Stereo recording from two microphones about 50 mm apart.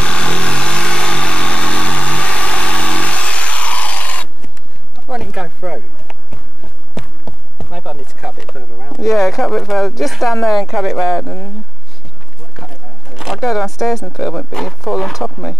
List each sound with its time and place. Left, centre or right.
0.0 s vehicle: left
5.1 s a sound: centre
7.0 s insect: centre
7.7 s bee: centre
9.3 s speech: centre
12.5 s a sound: centre
14.1 s speech: centre
14.5 s speech: centre